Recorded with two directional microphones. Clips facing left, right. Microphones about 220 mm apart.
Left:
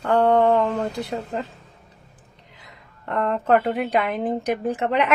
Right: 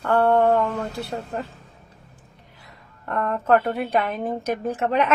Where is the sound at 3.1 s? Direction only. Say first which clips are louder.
Left 1 dB; 15° left (ahead or behind).